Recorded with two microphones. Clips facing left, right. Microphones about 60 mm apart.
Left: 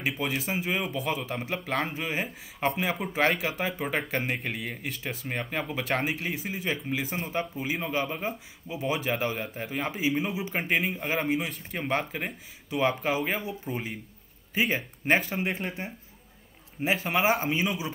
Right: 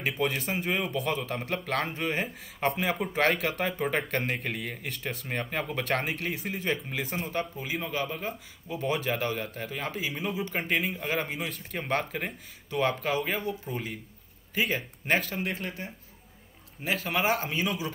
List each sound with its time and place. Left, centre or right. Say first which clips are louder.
0.0 s speech: right 1 dB; centre
10.8 s speech: left 1 dB; centre
14.5 s speech: left 2 dB; centre
17.3 s speech: left 2 dB; centre